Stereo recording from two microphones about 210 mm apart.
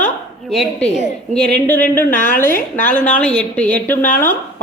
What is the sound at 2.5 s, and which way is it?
Speech, 40° left (ahead or behind).